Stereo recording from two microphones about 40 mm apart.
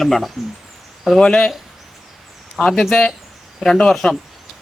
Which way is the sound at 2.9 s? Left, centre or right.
Left.